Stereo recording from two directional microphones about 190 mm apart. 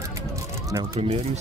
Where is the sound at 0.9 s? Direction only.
30° right (ahead or behind).